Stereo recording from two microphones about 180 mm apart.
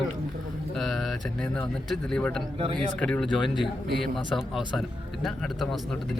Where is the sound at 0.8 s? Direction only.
Centre (ahead or behind).